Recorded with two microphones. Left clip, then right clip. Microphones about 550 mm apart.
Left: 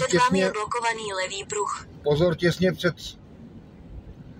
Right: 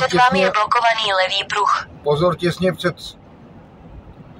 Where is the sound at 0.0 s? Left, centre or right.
Left.